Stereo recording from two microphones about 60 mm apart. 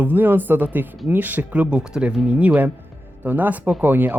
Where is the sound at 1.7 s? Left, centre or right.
Centre.